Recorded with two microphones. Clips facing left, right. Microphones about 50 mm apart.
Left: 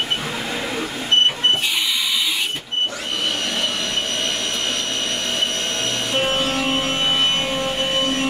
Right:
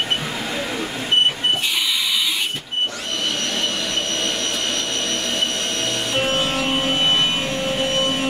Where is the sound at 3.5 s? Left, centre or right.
Centre.